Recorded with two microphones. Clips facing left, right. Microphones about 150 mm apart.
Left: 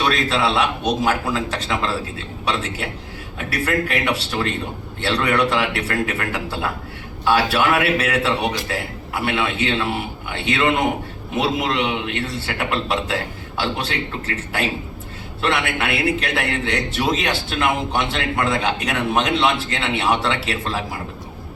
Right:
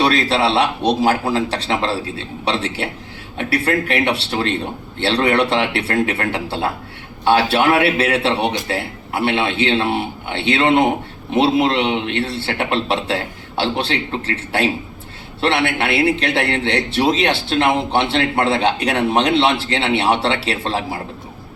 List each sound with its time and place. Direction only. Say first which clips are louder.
0.0 s a man's voice: right 4 dB; 35° right (ahead or behind)